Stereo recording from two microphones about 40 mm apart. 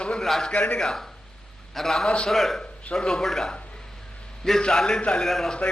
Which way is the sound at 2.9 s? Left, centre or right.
Centre.